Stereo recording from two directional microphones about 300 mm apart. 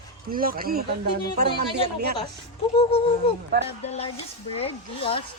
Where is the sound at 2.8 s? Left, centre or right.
Centre.